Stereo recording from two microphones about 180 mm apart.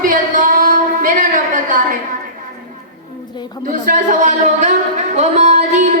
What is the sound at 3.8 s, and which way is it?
Music, 45° right (ahead or behind).